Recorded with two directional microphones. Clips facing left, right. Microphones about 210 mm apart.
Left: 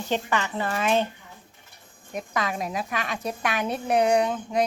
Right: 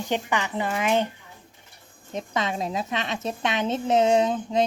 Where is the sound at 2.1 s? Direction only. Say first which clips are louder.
Right 1 dB; 25° right (ahead or behind).